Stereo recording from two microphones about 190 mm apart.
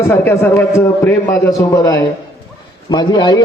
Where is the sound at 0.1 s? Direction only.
10° left (ahead or behind).